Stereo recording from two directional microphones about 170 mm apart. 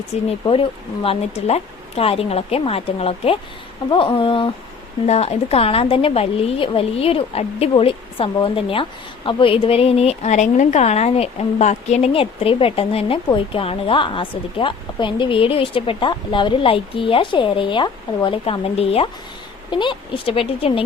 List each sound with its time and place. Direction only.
0.3 s a woman's voice: 30° left (ahead or behind)